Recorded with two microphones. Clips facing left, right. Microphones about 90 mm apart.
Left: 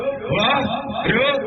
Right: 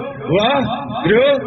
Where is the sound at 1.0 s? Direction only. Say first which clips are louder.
Right 8 dB; 35° right (ahead or behind).